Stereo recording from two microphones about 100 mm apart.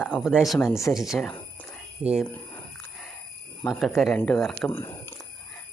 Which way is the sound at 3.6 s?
5° left (ahead or behind).